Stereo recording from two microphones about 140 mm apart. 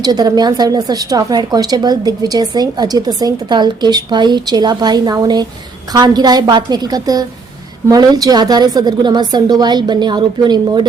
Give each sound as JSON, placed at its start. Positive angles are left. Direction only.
{"t": 0.0, "sound": "a woman's voice", "side_deg": -30}